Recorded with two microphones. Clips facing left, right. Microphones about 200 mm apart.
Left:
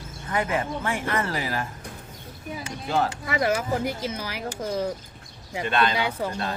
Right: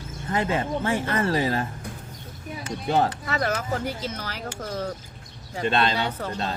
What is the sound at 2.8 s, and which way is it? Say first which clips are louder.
Speech: right 2 dB; 30° right (ahead or behind).